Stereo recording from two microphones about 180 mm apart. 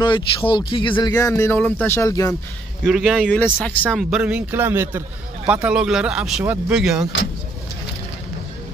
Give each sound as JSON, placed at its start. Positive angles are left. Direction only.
{"t": 0.0, "sound": "speech", "side_deg": 25}
{"t": 2.8, "sound": "speech", "side_deg": 0}
{"t": 3.9, "sound": "speech", "side_deg": 0}